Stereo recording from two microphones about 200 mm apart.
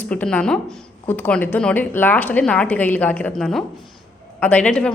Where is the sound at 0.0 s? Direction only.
5° left (ahead or behind).